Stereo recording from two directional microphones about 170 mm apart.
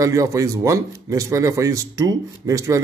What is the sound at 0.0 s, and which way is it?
A man's voice, 20° right (ahead or behind).